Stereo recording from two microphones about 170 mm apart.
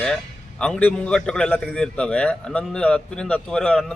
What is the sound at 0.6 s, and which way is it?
A man's voice, 5° left (ahead or behind).